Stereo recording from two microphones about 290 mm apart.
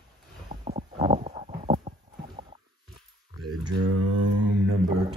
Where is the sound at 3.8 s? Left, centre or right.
Right.